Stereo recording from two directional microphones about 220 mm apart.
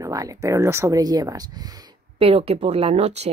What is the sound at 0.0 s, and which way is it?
Speech, 15° right (ahead or behind).